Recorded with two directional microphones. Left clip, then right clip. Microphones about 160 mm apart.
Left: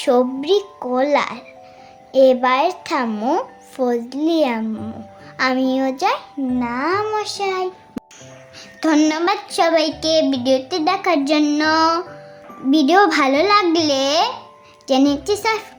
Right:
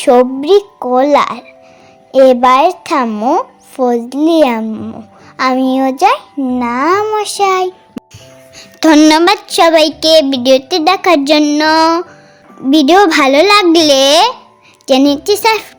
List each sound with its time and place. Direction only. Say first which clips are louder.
0.0 s a child's voice: right 8 dB; 40° right (ahead or behind)
8.0 s music: right 4 dB; centre (ahead or behind)
8.8 s speech: right 10 dB; 65° right (ahead or behind)